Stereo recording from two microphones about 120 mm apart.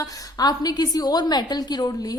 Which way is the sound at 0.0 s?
35° left (ahead or behind).